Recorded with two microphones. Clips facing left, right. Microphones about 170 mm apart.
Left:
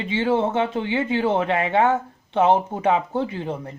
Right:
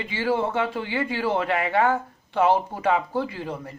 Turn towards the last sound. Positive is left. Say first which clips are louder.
# left 4 dB
turn(degrees=25)  # may be behind; listen again after turning